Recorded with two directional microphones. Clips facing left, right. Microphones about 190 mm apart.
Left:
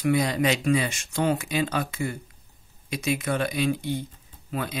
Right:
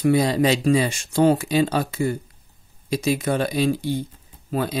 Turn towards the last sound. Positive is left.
turn(degrees=-35)  # may be behind; listen again after turning